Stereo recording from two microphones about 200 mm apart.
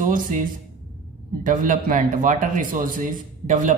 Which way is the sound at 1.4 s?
40° right (ahead or behind).